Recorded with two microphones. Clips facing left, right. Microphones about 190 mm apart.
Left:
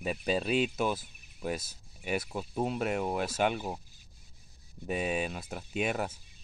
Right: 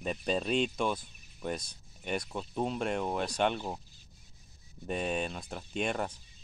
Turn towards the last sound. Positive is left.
turn(degrees=5)  # may be behind; listen again after turning